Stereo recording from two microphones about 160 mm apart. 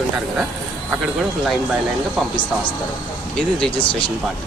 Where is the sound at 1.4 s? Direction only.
Centre (ahead or behind).